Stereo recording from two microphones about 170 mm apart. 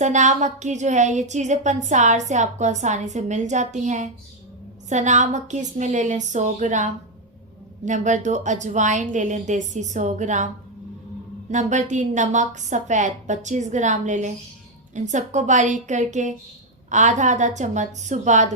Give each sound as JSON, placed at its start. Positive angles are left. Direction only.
{"t": 0.0, "sound": "a woman's voice", "side_deg": -45}
{"t": 11.5, "sound": "a woman's voice", "side_deg": -45}